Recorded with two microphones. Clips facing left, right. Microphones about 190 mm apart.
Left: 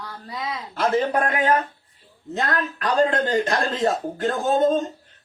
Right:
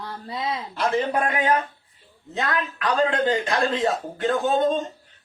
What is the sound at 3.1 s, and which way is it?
Speech, 40° left (ahead or behind).